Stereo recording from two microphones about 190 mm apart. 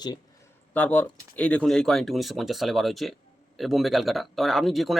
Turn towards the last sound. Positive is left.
turn(degrees=0)  # may be behind; listen again after turning